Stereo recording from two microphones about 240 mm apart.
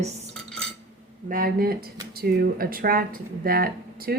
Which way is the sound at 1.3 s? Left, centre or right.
Right.